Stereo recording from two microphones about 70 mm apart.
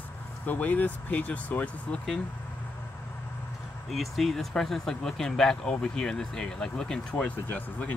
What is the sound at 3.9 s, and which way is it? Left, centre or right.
Speech, centre.